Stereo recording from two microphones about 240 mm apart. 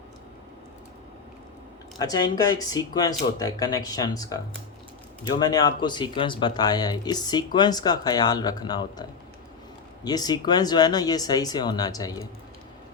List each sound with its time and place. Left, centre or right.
2.0 s speech: centre